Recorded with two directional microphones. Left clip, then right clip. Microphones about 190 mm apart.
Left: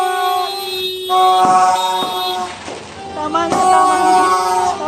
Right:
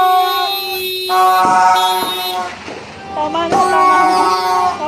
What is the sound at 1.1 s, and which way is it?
Music, 40° right (ahead or behind).